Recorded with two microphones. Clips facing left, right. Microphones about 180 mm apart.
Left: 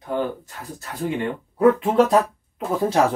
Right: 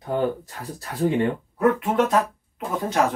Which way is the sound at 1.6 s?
30° left (ahead or behind).